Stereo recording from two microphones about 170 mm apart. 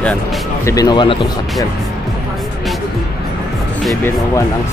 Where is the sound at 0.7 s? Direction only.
20° left (ahead or behind).